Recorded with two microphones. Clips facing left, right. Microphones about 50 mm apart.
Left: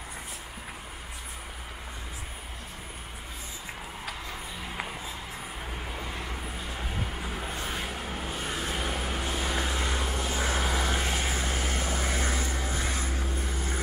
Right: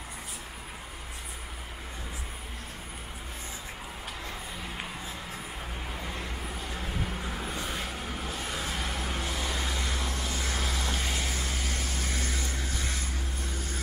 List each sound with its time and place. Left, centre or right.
7.3 s vehicle: centre